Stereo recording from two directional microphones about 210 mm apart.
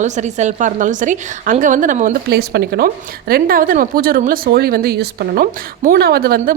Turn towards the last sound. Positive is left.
turn(degrees=-45)  # may be behind; listen again after turning